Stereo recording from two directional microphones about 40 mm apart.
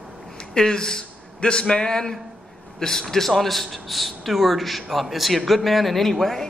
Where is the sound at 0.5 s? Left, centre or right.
Centre.